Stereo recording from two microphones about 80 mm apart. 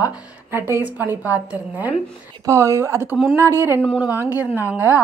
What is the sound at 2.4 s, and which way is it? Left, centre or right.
Speech, right.